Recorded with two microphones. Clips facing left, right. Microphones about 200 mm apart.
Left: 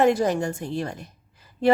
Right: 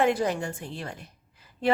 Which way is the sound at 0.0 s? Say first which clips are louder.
Left 4 dB; 40° left (ahead or behind).